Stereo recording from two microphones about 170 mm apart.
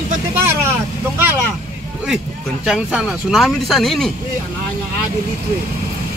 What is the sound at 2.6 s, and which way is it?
Speech, centre (ahead or behind).